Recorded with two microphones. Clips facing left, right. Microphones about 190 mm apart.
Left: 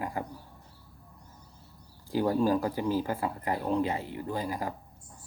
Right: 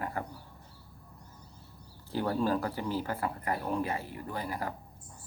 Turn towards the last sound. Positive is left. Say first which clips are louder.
# left 3 dB
turn(degrees=15)  # may be behind; listen again after turning